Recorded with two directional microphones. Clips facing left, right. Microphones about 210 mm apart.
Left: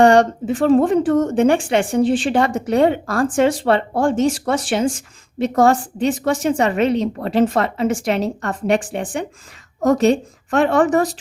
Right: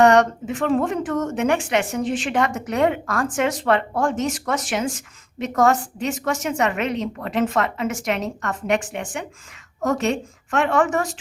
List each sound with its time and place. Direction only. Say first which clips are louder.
0.0 s speech: left 3 dB; 30° left (ahead or behind)